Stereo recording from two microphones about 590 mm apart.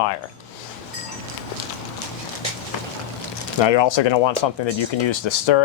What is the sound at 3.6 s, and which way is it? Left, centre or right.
Speech, left.